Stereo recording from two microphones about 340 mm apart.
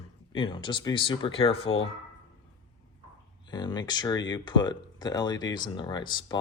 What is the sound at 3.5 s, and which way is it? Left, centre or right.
Speech, centre.